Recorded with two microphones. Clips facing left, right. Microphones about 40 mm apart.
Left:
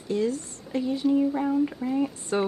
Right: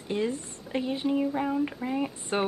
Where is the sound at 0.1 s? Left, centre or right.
Right.